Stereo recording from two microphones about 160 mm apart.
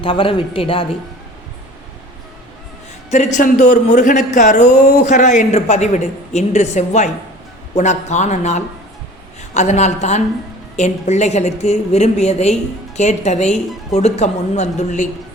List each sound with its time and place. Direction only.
0.0 s a man's voice: 35° left (ahead or behind)
3.3 s speech: 50° left (ahead or behind)